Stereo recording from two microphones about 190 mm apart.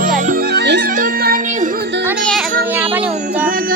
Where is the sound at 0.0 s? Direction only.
45° right (ahead or behind).